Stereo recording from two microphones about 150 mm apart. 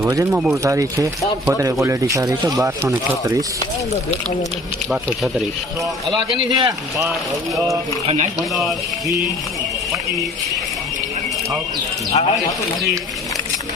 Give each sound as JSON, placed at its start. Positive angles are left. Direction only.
{"t": 0.0, "sound": "speech", "side_deg": -20}
{"t": 0.5, "sound": "speech", "side_deg": -20}
{"t": 2.6, "sound": "speech", "side_deg": -15}
{"t": 6.1, "sound": "a man's voice", "side_deg": -30}
{"t": 6.7, "sound": "speech", "side_deg": -20}
{"t": 8.0, "sound": "speech", "side_deg": -50}
{"t": 8.4, "sound": "speech", "side_deg": 0}
{"t": 12.1, "sound": "speech", "side_deg": 45}